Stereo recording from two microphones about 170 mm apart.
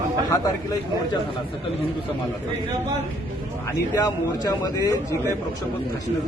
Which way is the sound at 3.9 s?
20° left (ahead or behind).